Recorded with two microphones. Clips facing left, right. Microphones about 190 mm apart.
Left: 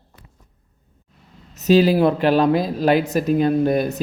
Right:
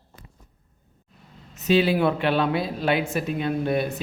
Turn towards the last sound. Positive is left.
turn(degrees=40)  # may be behind; listen again after turning